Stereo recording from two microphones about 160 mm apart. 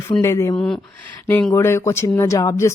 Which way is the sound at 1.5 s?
15° left (ahead or behind).